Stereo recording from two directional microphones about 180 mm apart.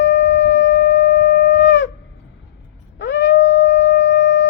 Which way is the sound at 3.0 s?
90° left.